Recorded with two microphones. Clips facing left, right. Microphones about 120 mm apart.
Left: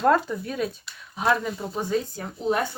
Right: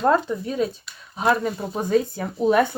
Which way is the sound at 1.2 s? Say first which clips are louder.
Right 3 dB; 40° right (ahead or behind).